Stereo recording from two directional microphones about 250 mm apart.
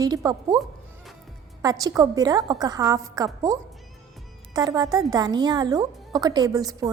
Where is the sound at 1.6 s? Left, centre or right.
Centre.